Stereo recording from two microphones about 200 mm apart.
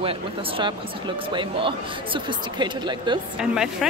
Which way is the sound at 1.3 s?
25° right (ahead or behind).